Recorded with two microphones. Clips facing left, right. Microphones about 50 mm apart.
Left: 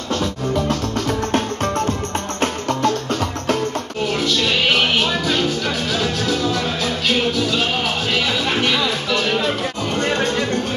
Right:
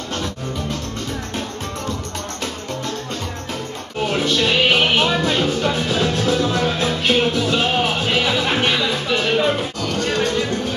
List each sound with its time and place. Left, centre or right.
4.1 s music: right
9.8 s music: left